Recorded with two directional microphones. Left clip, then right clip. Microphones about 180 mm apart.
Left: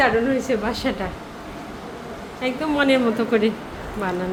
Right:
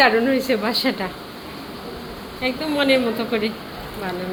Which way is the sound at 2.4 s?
15° left (ahead or behind).